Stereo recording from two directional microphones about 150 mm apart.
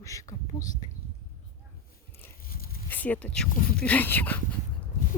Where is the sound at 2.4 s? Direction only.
80° left.